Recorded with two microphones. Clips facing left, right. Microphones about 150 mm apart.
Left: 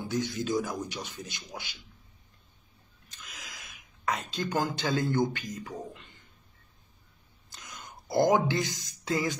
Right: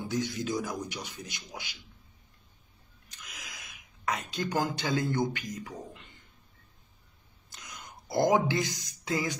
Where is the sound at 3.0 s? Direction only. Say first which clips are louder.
Left 1 dB; 20° right (ahead or behind).